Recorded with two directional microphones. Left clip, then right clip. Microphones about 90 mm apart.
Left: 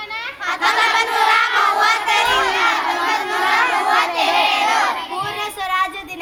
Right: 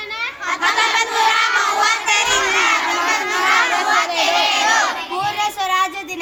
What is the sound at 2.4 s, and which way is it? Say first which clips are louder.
Crowd: right 1 dB; centre (ahead or behind).